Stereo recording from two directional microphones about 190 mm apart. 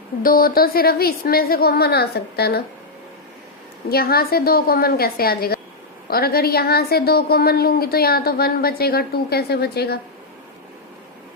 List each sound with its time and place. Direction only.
0.2 s a woman's voice: 50° left (ahead or behind)
3.8 s a woman's voice: 55° left (ahead or behind)